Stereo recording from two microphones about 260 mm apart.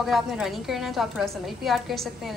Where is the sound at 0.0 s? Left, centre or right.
Centre.